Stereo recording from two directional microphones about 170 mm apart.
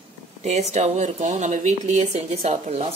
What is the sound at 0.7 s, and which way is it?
A woman's voice, 45° right (ahead or behind).